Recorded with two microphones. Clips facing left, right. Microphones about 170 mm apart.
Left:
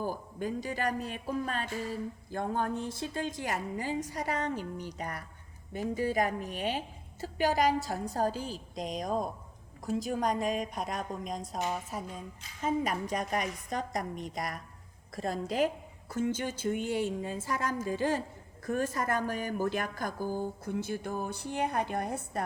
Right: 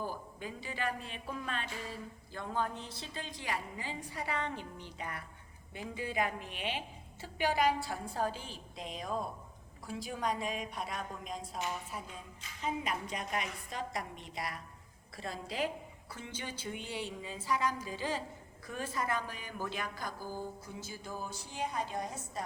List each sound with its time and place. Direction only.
0.0 s a man's voice: 45° left (ahead or behind); by 22.4 s 60° left (ahead or behind)